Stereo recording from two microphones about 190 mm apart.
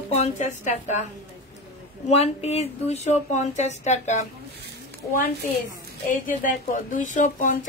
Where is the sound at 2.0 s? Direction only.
35° left (ahead or behind).